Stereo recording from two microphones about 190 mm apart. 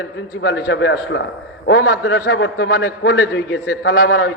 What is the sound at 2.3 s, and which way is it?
A man's voice, 60° left (ahead or behind).